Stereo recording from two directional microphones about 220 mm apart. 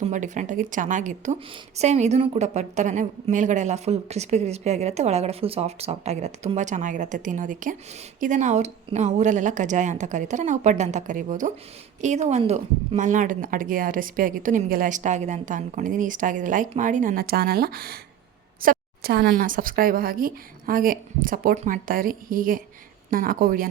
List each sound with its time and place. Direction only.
0.0 s a woman's voice: 35° right (ahead or behind)